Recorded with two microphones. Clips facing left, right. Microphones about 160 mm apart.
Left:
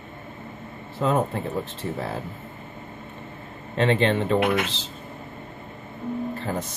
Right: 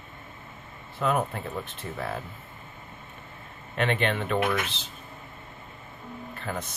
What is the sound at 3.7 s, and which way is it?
Speech, 30° left (ahead or behind).